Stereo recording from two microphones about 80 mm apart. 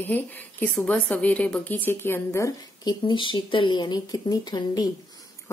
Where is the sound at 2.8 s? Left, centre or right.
Left.